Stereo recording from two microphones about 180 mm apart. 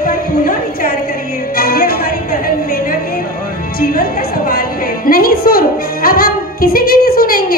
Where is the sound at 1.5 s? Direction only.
55° left (ahead or behind).